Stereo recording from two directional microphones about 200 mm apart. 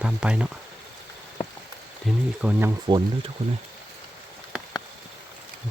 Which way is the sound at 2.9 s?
25° right (ahead or behind).